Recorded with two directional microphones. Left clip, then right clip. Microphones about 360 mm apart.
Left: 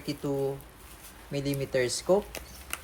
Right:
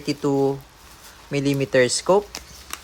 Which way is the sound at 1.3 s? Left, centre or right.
Centre.